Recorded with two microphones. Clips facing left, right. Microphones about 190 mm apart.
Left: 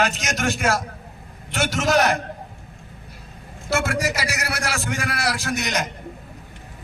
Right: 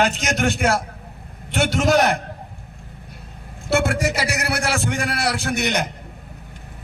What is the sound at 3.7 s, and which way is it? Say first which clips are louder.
A man's voice: right 3 dB; 60° right (ahead or behind).